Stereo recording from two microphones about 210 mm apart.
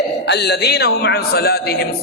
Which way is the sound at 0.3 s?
50° left (ahead or behind).